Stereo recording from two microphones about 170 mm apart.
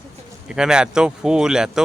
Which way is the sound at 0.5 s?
5° right (ahead or behind).